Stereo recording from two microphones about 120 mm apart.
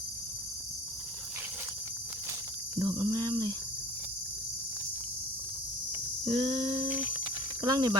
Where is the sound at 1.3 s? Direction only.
20° right (ahead or behind).